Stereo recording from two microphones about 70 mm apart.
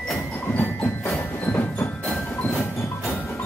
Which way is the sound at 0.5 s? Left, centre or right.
Left.